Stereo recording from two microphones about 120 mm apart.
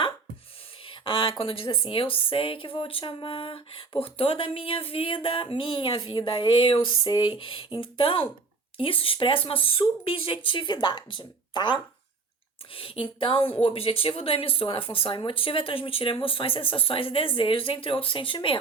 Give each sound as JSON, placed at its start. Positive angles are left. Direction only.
{"t": 0.9, "sound": "speech", "side_deg": 45}